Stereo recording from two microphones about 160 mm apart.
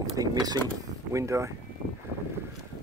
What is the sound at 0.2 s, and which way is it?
Speech, 25° right (ahead or behind).